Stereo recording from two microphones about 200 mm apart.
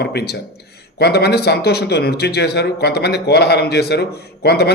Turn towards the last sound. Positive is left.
turn(degrees=55)  # may be behind; listen again after turning